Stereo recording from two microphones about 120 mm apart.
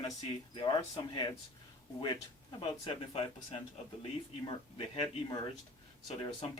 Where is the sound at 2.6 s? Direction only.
55° left (ahead or behind).